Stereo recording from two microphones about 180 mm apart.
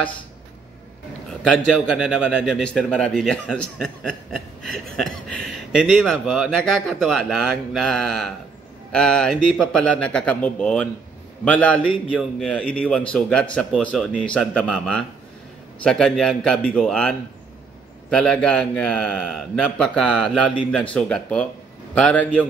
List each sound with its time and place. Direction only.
1.4 s a man's voice: centre (ahead or behind)